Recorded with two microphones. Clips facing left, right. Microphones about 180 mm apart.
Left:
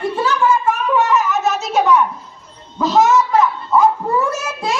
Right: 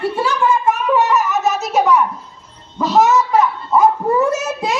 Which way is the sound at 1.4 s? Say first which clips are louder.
Right 1 dB; centre (ahead or behind).